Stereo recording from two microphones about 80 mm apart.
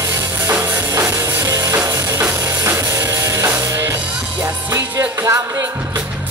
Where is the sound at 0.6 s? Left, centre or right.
Right.